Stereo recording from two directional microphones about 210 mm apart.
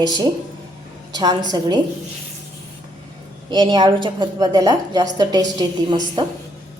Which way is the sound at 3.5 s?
20° right (ahead or behind).